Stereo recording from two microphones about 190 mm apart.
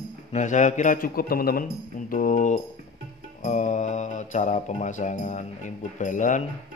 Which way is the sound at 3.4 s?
40° left (ahead or behind).